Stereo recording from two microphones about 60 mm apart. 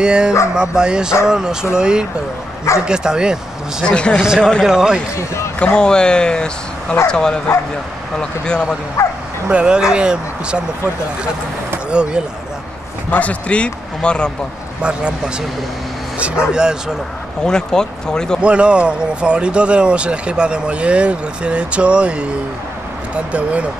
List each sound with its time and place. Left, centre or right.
0.0 s speech: centre
3.8 s speech: centre
4.6 s speech: centre
5.1 s speech: left
5.6 s speech: centre
9.0 s bow-wow: left
9.5 s speech: centre
11.9 s speech: centre
13.1 s speech: left
14.8 s speech: centre
17.5 s speech: centre
18.4 s speech: centre